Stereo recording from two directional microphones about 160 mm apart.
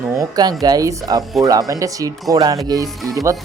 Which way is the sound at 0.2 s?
25° right (ahead or behind).